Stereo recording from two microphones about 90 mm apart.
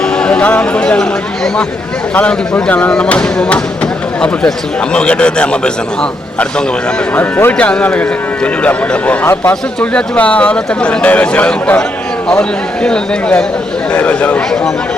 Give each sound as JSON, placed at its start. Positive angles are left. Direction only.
{"t": 0.2, "sound": "speech", "side_deg": 10}
{"t": 2.1, "sound": "a man's voice", "side_deg": 15}
{"t": 4.9, "sound": "a man's voice", "side_deg": 10}
{"t": 7.2, "sound": "a man's voice", "side_deg": 20}
{"t": 9.2, "sound": "speech", "side_deg": 25}
{"t": 9.5, "sound": "a man's voice", "side_deg": 15}